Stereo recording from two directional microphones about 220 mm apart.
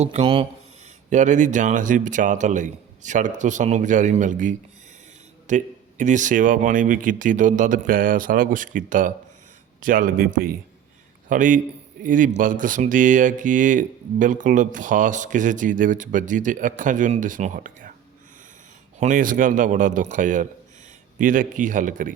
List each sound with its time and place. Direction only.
0.0 s speech: 30° right (ahead or behind)
18.9 s speech: 35° right (ahead or behind)